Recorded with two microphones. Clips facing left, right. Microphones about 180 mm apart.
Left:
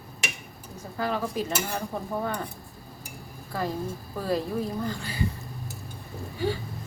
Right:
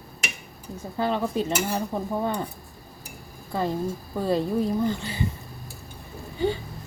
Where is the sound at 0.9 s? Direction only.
25° right (ahead or behind).